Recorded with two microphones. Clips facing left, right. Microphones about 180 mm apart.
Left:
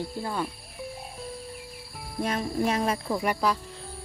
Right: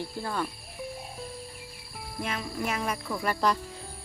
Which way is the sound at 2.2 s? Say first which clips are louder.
Left 6 dB; 40° left (ahead or behind).